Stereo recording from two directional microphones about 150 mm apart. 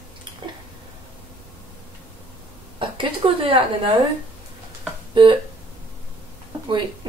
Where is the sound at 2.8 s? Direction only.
35° right (ahead or behind).